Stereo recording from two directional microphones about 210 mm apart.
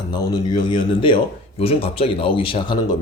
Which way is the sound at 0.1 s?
20° left (ahead or behind).